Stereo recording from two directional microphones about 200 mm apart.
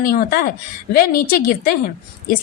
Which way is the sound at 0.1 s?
50° left (ahead or behind).